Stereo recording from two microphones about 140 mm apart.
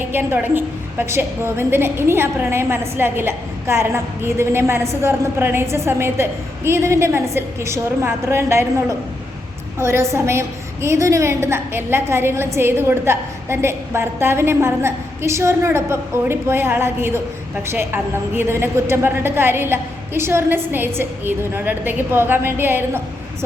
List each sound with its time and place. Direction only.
0.1 s a woman's voice: 15° right (ahead or behind)